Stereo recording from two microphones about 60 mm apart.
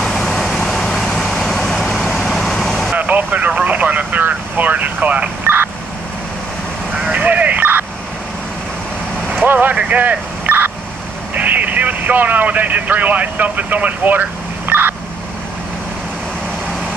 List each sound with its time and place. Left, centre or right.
0.0 s vehicle: centre
3.0 s vehicle: right
6.9 s vehicle: centre
9.4 s vehicle: right
11.3 s speech: right
14.7 s vehicle: right